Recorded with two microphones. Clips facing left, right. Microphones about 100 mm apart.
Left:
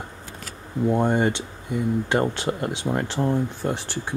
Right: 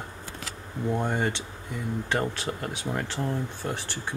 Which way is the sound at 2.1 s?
30° left (ahead or behind).